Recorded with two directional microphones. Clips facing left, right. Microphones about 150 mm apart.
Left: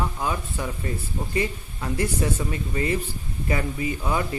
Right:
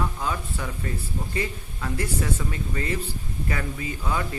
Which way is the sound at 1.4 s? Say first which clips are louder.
Left 5 dB; 20° left (ahead or behind).